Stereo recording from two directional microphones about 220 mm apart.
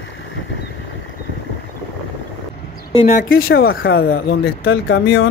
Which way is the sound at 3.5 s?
50° left (ahead or behind).